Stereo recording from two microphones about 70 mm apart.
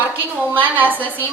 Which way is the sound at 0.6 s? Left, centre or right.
Right.